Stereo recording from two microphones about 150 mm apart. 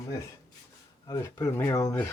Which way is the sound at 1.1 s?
25° left (ahead or behind).